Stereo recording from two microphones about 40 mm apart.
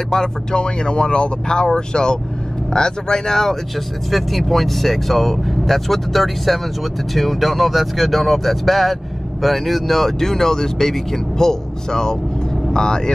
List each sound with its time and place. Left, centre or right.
0.1 s speech: centre